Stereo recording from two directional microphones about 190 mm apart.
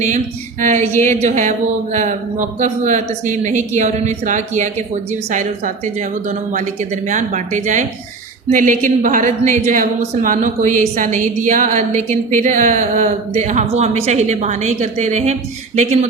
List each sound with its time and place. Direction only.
0.6 s a woman's voice: 40° right (ahead or behind)